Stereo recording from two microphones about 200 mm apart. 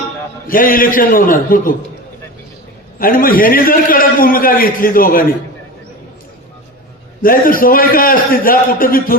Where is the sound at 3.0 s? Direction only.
45° left (ahead or behind).